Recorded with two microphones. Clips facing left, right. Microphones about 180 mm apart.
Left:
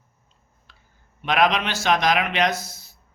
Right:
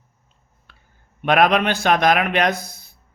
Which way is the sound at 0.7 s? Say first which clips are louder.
Right 2 dB; 60° right (ahead or behind).